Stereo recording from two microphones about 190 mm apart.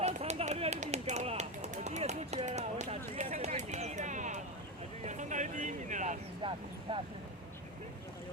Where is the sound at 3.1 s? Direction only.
35° right (ahead or behind).